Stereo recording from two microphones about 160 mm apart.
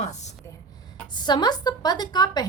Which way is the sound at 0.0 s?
45° left (ahead or behind).